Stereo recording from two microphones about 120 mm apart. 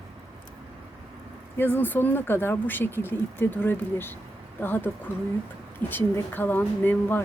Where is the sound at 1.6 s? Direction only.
15° left (ahead or behind).